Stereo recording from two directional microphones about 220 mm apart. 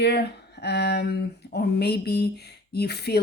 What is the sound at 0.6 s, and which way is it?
Speech, 50° left (ahead or behind).